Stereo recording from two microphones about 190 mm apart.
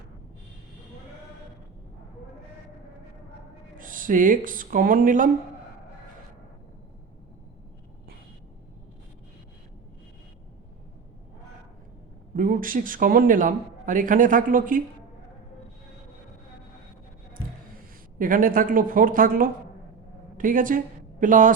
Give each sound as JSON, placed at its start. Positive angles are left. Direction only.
{"t": 3.8, "sound": "speech", "side_deg": -45}
{"t": 12.4, "sound": "a man's voice", "side_deg": -45}
{"t": 17.3, "sound": "a sound", "side_deg": -45}
{"t": 20.3, "sound": "speech", "side_deg": -45}